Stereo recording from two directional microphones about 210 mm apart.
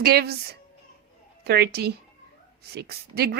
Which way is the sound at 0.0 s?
50° right (ahead or behind).